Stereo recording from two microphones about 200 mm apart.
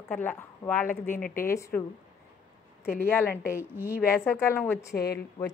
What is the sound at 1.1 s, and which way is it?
Speech, 45° left (ahead or behind).